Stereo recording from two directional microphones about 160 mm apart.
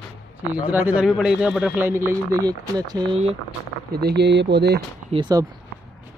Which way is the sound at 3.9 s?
90° right.